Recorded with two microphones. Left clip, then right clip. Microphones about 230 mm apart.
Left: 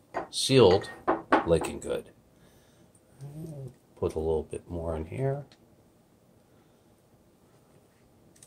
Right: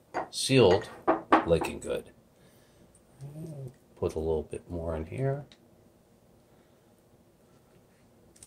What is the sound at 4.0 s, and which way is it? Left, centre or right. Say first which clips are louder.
Speech: left 1 dB; centre.